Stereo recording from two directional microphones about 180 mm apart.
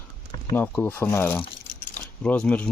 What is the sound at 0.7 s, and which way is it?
Speech, 10° left (ahead or behind).